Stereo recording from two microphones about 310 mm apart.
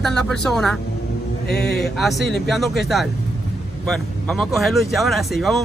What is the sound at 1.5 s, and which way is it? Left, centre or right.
Speech, left.